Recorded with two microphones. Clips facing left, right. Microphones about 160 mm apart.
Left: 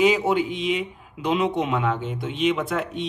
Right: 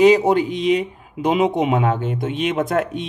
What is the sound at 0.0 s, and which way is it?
Speech, 40° right (ahead or behind).